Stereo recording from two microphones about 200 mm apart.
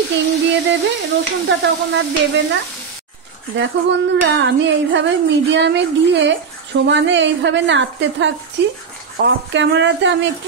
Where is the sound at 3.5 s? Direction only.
65° right (ahead or behind).